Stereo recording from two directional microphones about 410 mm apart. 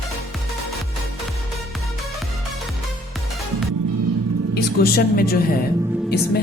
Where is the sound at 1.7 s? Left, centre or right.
Centre.